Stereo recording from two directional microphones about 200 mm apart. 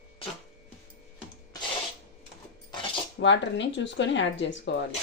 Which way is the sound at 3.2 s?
65° left (ahead or behind).